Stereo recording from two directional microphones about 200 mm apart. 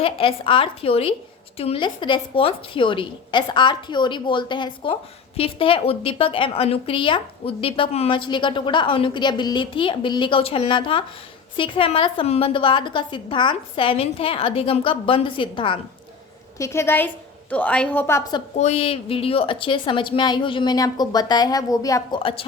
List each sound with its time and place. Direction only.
0.0 s a woman's voice: 25° left (ahead or behind)
16.6 s a woman's voice: 15° left (ahead or behind)
18.5 s a woman's voice: 35° left (ahead or behind)